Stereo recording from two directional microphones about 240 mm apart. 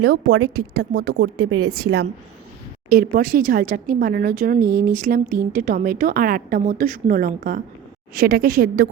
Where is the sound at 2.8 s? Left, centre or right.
Right.